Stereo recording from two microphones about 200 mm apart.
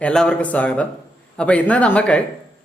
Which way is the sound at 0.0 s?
5° left (ahead or behind).